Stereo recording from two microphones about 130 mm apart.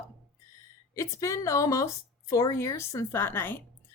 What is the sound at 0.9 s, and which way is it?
A woman's voice, 20° left (ahead or behind).